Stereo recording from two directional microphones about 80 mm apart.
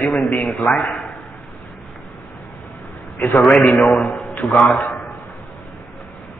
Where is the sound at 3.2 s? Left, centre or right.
Centre.